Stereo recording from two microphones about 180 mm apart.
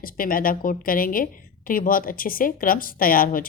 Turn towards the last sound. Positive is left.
turn(degrees=50)  # may be behind; listen again after turning